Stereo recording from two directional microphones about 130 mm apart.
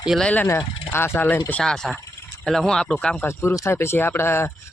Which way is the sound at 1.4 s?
5° left (ahead or behind).